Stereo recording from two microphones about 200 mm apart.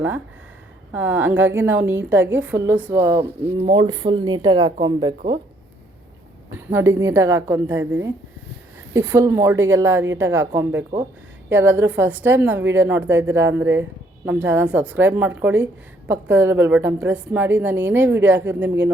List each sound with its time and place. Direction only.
0.9 s a woman's voice: 10° right (ahead or behind)
3.6 s speech: 25° right (ahead or behind)
6.5 s a woman's voice: 15° right (ahead or behind)